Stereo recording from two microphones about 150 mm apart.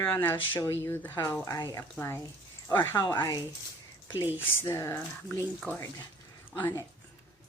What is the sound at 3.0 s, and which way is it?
Speech, 25° left (ahead or behind).